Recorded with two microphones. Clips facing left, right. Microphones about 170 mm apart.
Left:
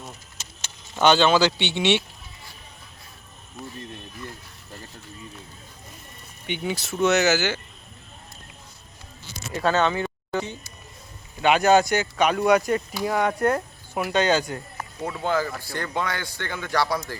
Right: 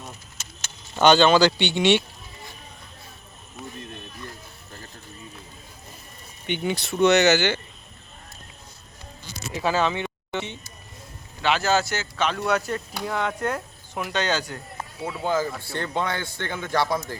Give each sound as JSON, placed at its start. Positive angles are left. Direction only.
{"t": 0.9, "sound": "speech", "side_deg": 0}
{"t": 6.5, "sound": "speech", "side_deg": 5}
{"t": 9.5, "sound": "speech", "side_deg": -5}
{"t": 11.6, "sound": "speech", "side_deg": 15}
{"t": 14.9, "sound": "a man's voice", "side_deg": -10}